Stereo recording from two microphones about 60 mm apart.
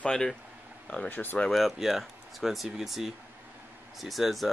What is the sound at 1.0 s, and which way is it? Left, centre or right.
Speech, left.